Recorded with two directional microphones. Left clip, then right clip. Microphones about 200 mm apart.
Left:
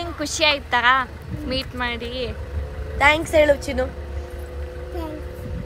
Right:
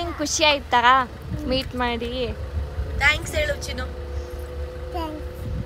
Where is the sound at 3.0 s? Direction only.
20° left (ahead or behind).